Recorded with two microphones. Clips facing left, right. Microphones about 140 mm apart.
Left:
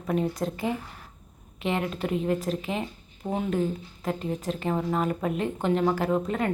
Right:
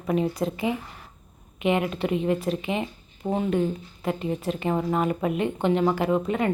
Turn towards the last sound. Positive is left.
turn(degrees=-5)  # may be behind; listen again after turning